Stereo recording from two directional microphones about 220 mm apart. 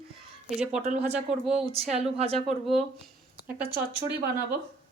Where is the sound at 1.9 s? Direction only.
30° right (ahead or behind).